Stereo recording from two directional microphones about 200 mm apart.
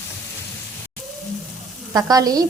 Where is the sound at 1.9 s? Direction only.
20° right (ahead or behind).